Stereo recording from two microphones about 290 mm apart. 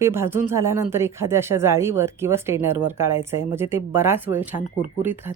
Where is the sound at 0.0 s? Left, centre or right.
Centre.